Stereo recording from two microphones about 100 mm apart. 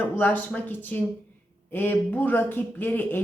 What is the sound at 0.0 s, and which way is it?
A woman's voice, 20° left (ahead or behind).